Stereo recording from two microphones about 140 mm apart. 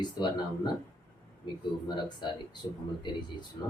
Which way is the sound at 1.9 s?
35° left (ahead or behind).